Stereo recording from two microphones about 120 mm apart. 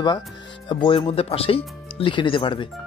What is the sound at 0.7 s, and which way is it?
Speech, 45° left (ahead or behind).